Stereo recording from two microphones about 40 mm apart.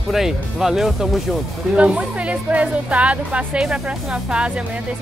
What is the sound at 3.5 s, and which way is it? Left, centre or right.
Speech, centre.